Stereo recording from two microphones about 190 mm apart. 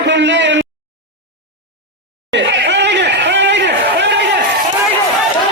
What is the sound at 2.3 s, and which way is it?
Chatter, 70° right (ahead or behind).